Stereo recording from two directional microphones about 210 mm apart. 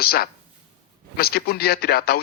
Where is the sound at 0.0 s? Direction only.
45° left (ahead or behind).